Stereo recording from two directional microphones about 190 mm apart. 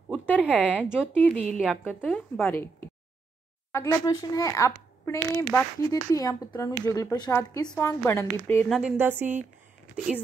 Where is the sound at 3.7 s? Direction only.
20° left (ahead or behind).